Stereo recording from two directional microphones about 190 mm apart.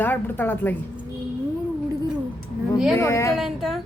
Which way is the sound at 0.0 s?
10° left (ahead or behind).